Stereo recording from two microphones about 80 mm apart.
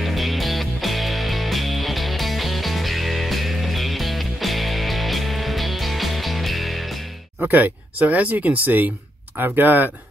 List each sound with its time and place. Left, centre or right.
0.0 s music: centre
7.4 s speech: right